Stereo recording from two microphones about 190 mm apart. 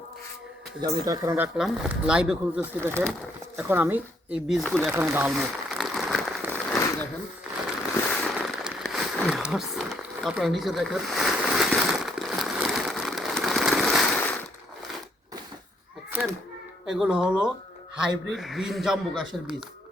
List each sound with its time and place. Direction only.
0.8 s speech: 20° right (ahead or behind)
1.5 s speech: centre (ahead or behind)
4.9 s speech: 10° right (ahead or behind)
5.3 s crumpling: centre (ahead or behind)
8.1 s a sound: 5° left (ahead or behind)
16.8 s speech: centre (ahead or behind)